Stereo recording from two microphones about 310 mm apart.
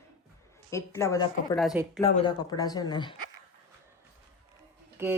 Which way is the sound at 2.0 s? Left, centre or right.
Centre.